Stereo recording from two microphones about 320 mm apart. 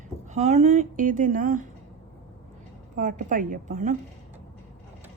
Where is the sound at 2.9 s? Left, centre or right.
Right.